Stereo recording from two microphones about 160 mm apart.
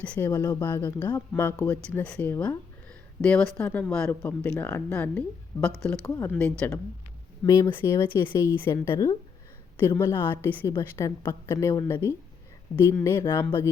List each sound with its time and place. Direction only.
0.0 s speech: 5° left (ahead or behind)
0.3 s speech: 20° left (ahead or behind)
7.4 s speech: 20° left (ahead or behind)